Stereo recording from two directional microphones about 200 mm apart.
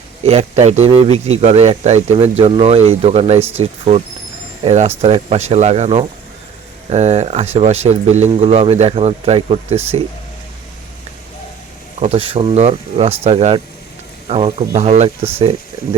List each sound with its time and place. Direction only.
0.2 s speech: 30° right (ahead or behind)
11.9 s speech: 30° right (ahead or behind)